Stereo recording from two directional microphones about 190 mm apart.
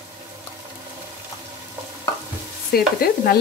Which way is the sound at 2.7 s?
55° left (ahead or behind).